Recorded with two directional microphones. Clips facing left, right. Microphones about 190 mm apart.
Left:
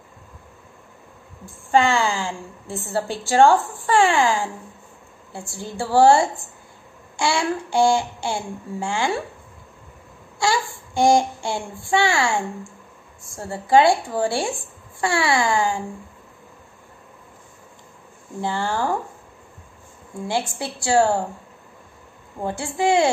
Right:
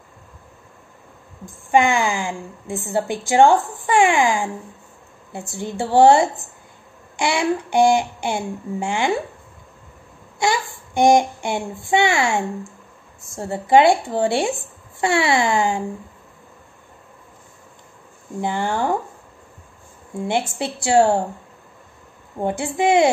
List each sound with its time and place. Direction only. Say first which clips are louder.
1.4 s a woman's voice: right 1 dB; 15° right (ahead or behind)
10.4 s babbling: right 1 dB; 20° right (ahead or behind)
11.0 s a woman's voice: right 2 dB; 20° right (ahead or behind)
18.4 s a woman's voice: right 2 dB; 20° right (ahead or behind)
20.2 s a woman's voice: right 3 dB; 20° right (ahead or behind)
22.4 s a woman's voice: right 3 dB; 20° right (ahead or behind)